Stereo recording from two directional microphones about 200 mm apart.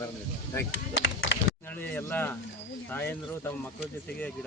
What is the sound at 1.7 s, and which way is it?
Speech, 10° left (ahead or behind).